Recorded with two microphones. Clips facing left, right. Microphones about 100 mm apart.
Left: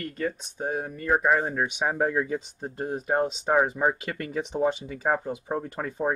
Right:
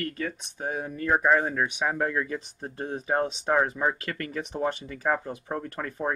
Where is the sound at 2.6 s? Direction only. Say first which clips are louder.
Left 2 dB; 5° left (ahead or behind).